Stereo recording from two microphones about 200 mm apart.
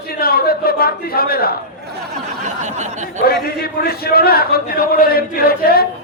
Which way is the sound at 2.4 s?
35° right (ahead or behind).